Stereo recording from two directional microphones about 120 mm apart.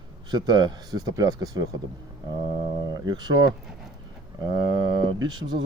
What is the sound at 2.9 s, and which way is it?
Speech, 35° right (ahead or behind).